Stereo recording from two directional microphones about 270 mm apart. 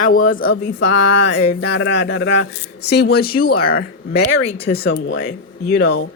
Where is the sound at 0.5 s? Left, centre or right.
Left.